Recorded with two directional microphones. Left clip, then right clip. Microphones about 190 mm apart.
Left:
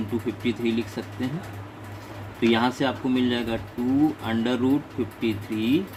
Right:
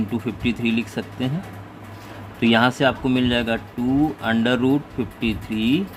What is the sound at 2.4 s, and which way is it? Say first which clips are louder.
Speech: right 5 dB; 45° right (ahead or behind).